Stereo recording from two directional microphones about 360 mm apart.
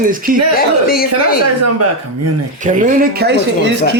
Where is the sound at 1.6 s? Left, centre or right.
Right.